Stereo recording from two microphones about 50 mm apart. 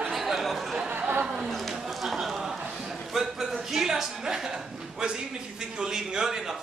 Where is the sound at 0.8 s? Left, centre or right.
Right.